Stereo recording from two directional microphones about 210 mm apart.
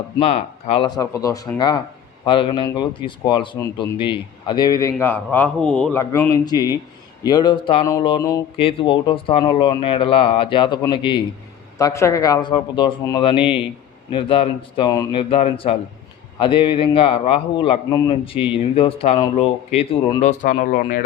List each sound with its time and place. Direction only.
0.2 s speech: 30° left (ahead or behind)